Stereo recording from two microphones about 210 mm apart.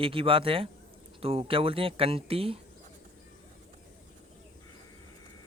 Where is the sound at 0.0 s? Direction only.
25° right (ahead or behind).